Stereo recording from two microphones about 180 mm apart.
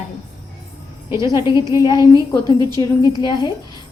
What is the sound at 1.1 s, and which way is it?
Speech, 15° right (ahead or behind).